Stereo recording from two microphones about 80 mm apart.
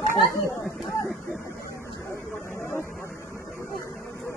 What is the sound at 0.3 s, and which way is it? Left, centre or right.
Speech, left.